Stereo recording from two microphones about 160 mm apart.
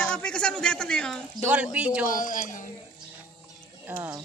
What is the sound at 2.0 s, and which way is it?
Speech, 60° left (ahead or behind).